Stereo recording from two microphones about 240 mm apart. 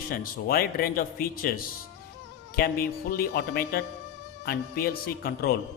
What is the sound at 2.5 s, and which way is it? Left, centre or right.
Speech, left.